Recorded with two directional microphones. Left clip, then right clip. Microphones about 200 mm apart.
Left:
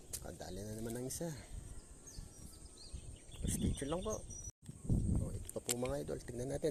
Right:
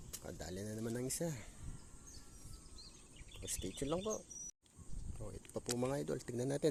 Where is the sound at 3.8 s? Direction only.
10° right (ahead or behind).